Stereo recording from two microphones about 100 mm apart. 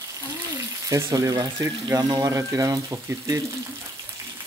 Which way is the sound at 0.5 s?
30° right (ahead or behind).